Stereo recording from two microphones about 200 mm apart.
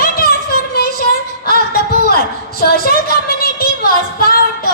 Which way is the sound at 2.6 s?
50° left (ahead or behind).